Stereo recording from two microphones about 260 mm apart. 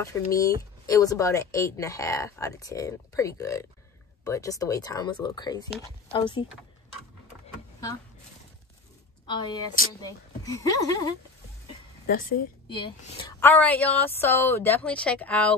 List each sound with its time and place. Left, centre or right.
0.0 s a woman's voice: centre
9.2 s speech: centre
12.6 s a woman's voice: centre
13.4 s speech: centre